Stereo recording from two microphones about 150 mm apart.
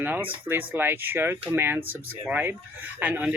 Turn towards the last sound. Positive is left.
turn(degrees=-10)  # may be behind; listen again after turning